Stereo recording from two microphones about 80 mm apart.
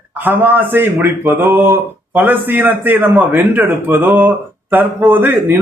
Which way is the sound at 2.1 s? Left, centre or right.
Right.